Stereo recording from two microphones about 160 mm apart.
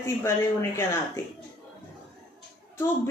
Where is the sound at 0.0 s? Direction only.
15° left (ahead or behind).